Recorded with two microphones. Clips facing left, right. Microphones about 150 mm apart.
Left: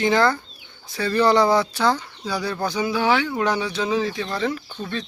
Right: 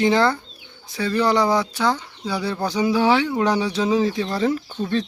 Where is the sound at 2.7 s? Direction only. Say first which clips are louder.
Right 3 dB; 30° right (ahead or behind).